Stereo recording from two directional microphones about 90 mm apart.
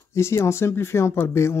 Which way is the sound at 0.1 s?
30° left (ahead or behind).